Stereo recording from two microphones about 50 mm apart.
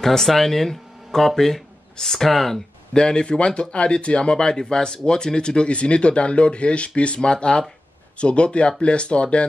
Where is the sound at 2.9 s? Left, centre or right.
Centre.